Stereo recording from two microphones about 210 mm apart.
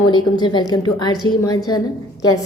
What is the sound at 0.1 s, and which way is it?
A woman's voice, 20° left (ahead or behind).